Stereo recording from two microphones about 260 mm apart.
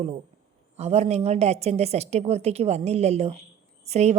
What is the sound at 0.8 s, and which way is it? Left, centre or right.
A woman's voice, right.